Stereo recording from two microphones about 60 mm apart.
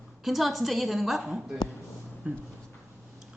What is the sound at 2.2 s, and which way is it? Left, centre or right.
Speech, right.